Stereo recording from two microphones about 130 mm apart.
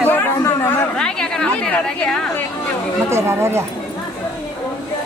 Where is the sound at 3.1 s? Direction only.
20° right (ahead or behind).